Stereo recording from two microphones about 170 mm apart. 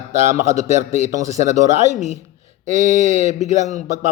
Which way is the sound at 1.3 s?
45° right (ahead or behind).